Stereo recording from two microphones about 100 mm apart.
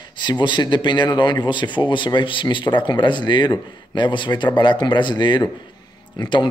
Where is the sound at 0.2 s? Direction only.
50° left (ahead or behind).